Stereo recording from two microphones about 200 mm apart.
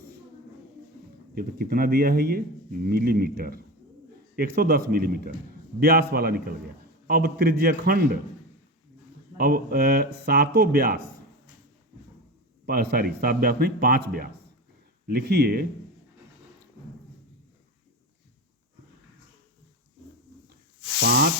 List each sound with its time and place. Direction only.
1.4 s speech: 50° right (ahead or behind)
9.4 s speech: 50° right (ahead or behind)
12.6 s speech: 50° right (ahead or behind)